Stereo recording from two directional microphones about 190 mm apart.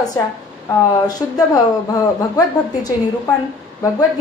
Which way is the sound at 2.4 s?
20° left (ahead or behind).